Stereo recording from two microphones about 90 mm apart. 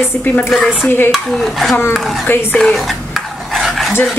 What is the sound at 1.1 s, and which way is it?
Speech, centre (ahead or behind).